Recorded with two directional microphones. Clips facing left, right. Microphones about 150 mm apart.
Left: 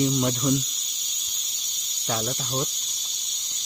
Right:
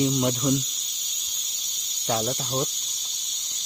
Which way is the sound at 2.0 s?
30° right (ahead or behind).